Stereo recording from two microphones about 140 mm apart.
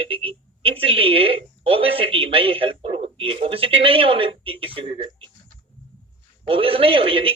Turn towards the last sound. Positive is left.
turn(degrees=-40)  # may be behind; listen again after turning